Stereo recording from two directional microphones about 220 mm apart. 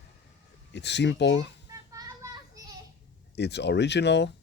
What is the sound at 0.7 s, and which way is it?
Speech, 50° left (ahead or behind).